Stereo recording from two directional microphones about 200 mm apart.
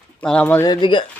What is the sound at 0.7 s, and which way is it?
Speech, 25° left (ahead or behind).